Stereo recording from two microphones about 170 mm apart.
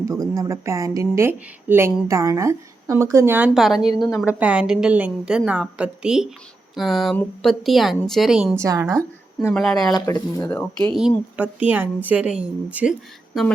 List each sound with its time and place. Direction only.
0.0 s a woman's voice: 20° right (ahead or behind); by 8.5 s centre (ahead or behind)
8.5 s a woman's voice: 15° right (ahead or behind)
9.6 s speech: centre (ahead or behind)
9.9 s speech: 25° left (ahead or behind)
10.4 s speech: 10° left (ahead or behind)
11.3 s a woman's voice: 10° right (ahead or behind)